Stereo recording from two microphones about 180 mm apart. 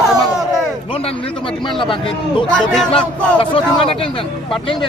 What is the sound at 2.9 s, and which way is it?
A man's voice, 30° left (ahead or behind).